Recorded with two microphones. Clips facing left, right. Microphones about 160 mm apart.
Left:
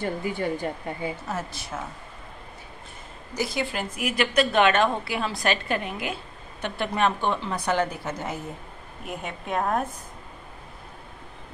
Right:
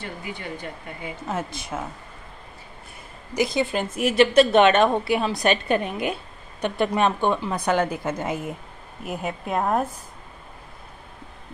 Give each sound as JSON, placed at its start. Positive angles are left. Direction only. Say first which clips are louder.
{"t": 0.0, "sound": "speech", "louder": "left 7 dB", "side_deg": 40}
{"t": 1.3, "sound": "a woman's voice", "louder": "right 3 dB", "side_deg": -15}
{"t": 3.3, "sound": "a woman's voice", "louder": "right 5 dB", "side_deg": -20}